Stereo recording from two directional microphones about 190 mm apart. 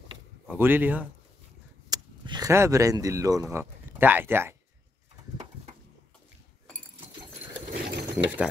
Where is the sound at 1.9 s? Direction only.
20° right (ahead or behind).